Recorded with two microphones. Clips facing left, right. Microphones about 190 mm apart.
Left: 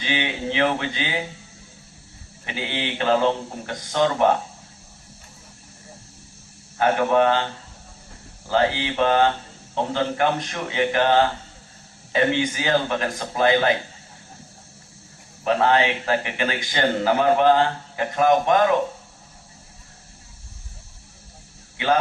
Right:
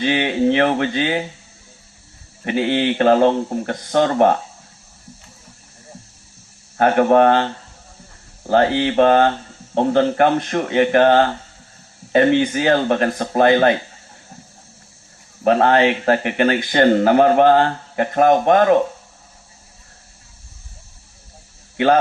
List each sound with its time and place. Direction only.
0.0 s speech: 50° right (ahead or behind)
2.4 s speech: 50° right (ahead or behind)
6.7 s speech: 50° right (ahead or behind)
15.4 s speech: 55° right (ahead or behind)